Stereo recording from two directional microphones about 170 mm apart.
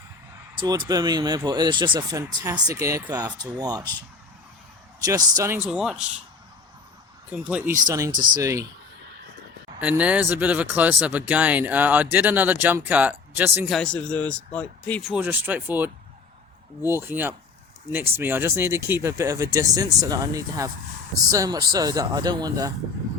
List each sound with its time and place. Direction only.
0.5 s speech: 25° right (ahead or behind)
5.0 s speech: 20° right (ahead or behind); by 6.2 s 5° right (ahead or behind)
7.3 s speech: 5° right (ahead or behind)
7.9 s speech: 20° right (ahead or behind)
9.8 s speech: 10° right (ahead or behind)
13.7 s speech: 5° left (ahead or behind)
15.1 s speech: 10° right (ahead or behind)